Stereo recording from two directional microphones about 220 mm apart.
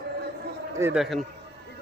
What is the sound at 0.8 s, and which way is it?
Speech, 5° right (ahead or behind).